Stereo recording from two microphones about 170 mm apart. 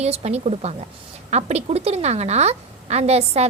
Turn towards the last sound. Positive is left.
turn(degrees=-35)  # may be behind; listen again after turning